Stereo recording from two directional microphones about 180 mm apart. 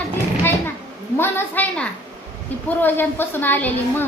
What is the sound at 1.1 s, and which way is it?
A woman's voice, 10° left (ahead or behind).